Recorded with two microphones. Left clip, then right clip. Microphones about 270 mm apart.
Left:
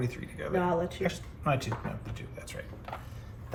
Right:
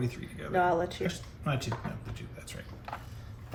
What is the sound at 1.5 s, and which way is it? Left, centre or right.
Speech, centre.